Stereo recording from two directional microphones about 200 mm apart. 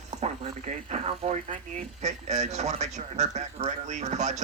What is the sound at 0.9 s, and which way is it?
Radio, 35° right (ahead or behind).